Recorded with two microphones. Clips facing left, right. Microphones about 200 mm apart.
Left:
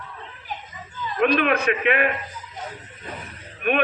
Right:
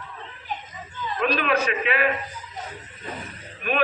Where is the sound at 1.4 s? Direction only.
60° left (ahead or behind).